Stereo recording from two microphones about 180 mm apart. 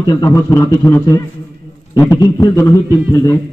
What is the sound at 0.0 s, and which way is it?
A man's voice, 20° left (ahead or behind).